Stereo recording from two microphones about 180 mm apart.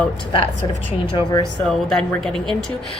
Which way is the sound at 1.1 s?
20° left (ahead or behind).